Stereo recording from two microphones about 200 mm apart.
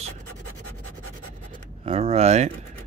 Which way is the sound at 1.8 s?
30° right (ahead or behind).